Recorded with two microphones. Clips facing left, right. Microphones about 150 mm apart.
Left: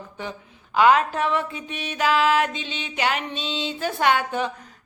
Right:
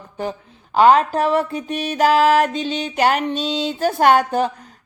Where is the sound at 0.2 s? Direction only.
35° right (ahead or behind).